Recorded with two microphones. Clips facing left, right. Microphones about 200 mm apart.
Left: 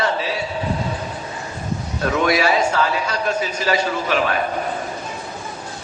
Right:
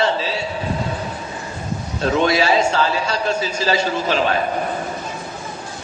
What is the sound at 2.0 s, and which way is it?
A man's voice, 25° right (ahead or behind).